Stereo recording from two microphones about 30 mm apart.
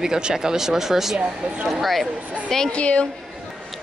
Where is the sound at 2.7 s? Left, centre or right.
Left.